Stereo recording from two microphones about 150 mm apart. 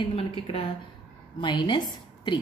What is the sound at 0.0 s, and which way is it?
A woman's voice, 35° left (ahead or behind).